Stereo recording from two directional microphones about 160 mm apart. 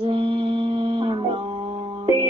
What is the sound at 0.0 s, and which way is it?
Mantra, 35° right (ahead or behind).